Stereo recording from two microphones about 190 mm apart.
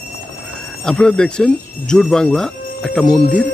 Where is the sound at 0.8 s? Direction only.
5° left (ahead or behind).